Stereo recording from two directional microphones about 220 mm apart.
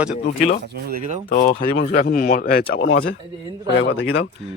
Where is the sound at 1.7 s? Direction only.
50° left (ahead or behind); by 4.3 s 65° left (ahead or behind).